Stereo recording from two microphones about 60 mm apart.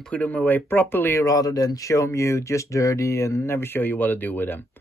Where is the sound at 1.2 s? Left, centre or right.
Left.